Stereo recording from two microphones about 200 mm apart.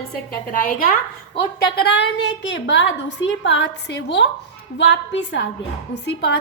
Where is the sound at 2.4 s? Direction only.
65° left (ahead or behind).